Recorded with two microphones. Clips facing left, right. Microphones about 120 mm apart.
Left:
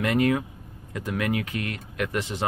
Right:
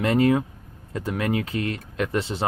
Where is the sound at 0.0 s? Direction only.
30° right (ahead or behind).